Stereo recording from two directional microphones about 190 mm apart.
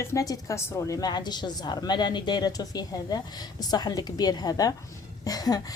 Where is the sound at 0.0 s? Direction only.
15° left (ahead or behind).